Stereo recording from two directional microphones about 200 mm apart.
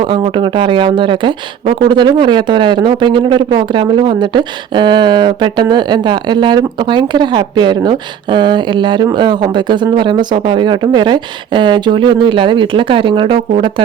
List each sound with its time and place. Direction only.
0.0 s speech: 25° right (ahead or behind)